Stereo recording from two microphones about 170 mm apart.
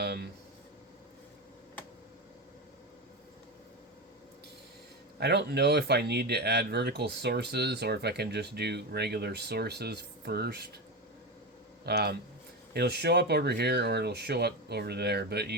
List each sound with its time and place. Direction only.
0.0 s a sound: 75° right (ahead or behind)
5.2 s speech: 80° right
11.9 s speech: 70° right (ahead or behind)